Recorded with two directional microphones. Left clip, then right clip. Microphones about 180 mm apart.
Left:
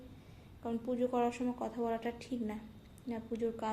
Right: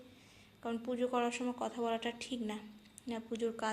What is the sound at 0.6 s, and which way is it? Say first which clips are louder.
A woman's voice: left 1 dB; 10° left (ahead or behind).